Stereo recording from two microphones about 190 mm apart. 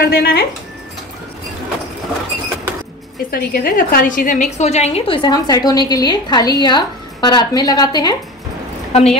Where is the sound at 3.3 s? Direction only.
50° left (ahead or behind); by 8.1 s 20° left (ahead or behind).